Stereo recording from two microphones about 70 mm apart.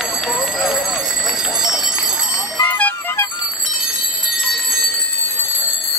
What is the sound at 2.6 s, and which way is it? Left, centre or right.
Music, left.